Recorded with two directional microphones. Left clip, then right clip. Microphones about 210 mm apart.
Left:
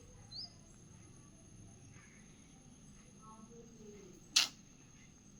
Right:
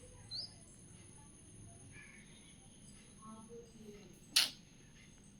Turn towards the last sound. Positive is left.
turn(degrees=-5)  # may be behind; listen again after turning